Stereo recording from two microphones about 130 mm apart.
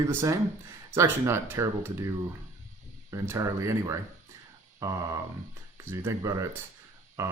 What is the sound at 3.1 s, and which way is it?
Speech, 25° right (ahead or behind).